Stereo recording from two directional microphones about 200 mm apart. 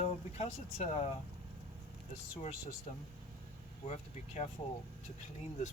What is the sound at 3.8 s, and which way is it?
Speech, 35° left (ahead or behind).